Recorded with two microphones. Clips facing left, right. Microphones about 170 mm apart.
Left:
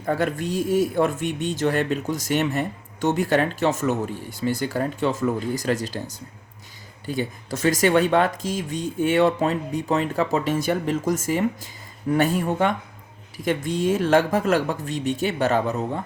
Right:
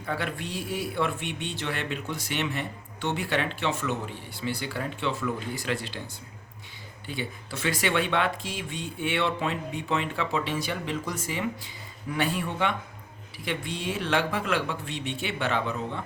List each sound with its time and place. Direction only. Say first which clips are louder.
0.0 s a man's voice: left 8 dB; 45° left (ahead or behind)